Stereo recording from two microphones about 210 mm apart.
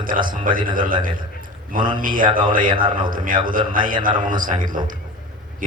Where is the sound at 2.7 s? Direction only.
20° right (ahead or behind).